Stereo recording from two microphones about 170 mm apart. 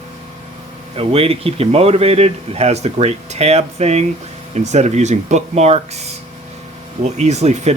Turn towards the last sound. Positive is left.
turn(degrees=-40)  # may be behind; listen again after turning